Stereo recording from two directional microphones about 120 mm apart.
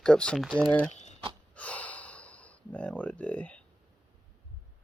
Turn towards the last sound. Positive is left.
turn(degrees=10)  # may be behind; listen again after turning